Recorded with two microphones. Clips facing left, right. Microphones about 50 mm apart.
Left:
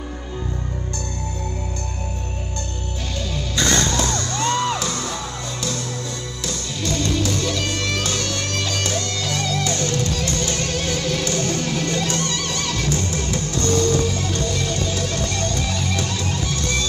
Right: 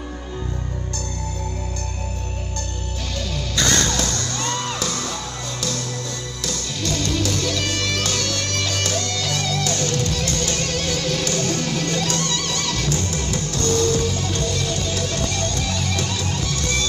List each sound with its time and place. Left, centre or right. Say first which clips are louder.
3.3 s music: left 1 dB; left
6.4 s music: even; left